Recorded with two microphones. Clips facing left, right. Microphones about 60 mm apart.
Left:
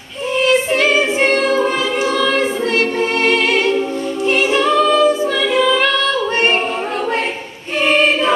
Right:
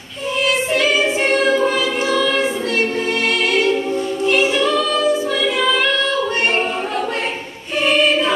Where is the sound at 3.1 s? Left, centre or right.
Left.